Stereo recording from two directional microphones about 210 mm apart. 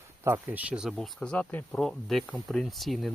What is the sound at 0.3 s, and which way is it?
Speech, 10° right (ahead or behind).